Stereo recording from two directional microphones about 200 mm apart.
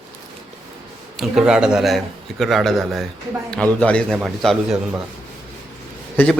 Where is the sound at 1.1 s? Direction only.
Centre (ahead or behind).